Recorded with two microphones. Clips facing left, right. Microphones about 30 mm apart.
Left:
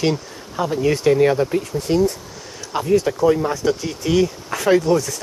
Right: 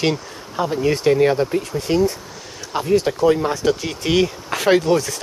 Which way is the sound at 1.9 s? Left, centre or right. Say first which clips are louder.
Even; right.